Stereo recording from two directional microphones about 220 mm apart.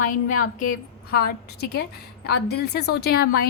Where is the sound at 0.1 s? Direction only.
40° left (ahead or behind).